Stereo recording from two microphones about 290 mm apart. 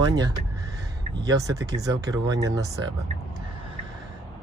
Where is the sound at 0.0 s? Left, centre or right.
Centre.